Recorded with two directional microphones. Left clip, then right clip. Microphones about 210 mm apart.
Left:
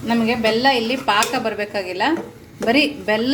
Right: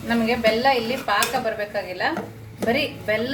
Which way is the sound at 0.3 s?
35° left (ahead or behind).